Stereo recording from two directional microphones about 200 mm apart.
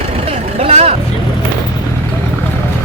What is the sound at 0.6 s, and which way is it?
Speech, 30° right (ahead or behind).